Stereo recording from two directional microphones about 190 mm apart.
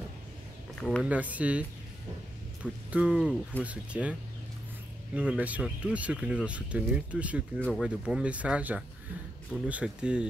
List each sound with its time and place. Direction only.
0.7 s speech: 5° left (ahead or behind)
1.0 s speech: 10° right (ahead or behind)